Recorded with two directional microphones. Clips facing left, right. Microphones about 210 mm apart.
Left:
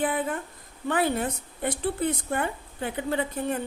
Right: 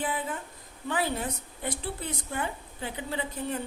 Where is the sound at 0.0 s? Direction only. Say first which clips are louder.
Left 5 dB; 55° left (ahead or behind).